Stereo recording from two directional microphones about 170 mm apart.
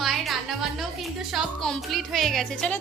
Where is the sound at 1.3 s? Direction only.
Centre (ahead or behind).